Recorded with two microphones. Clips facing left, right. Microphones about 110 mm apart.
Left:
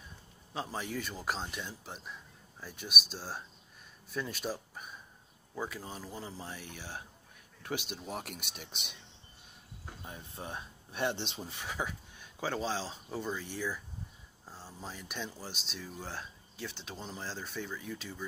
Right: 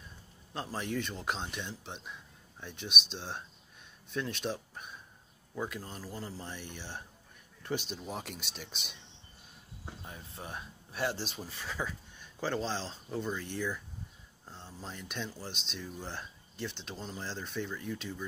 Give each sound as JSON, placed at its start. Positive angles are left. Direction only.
{"t": 0.5, "sound": "speech", "side_deg": 0}
{"t": 8.4, "sound": "speech", "side_deg": 60}
{"t": 10.3, "sound": "speech", "side_deg": 25}